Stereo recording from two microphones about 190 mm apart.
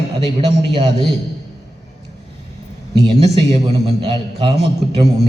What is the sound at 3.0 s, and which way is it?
A man's voice, 25° right (ahead or behind).